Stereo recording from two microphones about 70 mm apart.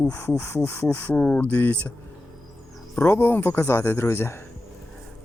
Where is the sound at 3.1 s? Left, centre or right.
Left.